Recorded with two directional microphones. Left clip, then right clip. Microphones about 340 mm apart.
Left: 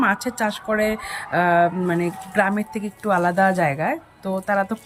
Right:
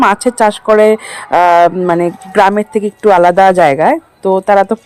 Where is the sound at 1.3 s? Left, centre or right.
Right.